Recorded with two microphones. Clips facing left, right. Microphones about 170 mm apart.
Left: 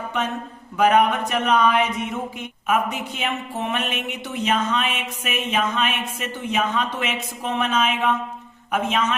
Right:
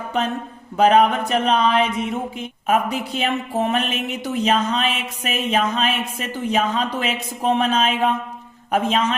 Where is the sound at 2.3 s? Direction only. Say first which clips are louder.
Right 2 dB; 30° right (ahead or behind).